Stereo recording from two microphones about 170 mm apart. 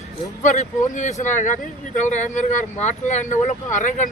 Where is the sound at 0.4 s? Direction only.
45° left (ahead or behind).